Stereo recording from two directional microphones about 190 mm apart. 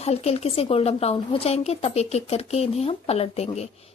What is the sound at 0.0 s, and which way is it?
A woman's voice, 35° left (ahead or behind).